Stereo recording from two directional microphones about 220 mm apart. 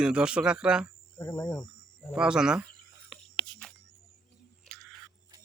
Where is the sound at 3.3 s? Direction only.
20° left (ahead or behind).